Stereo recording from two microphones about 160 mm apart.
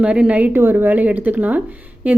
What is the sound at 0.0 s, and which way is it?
A woman's voice, 10° right (ahead or behind).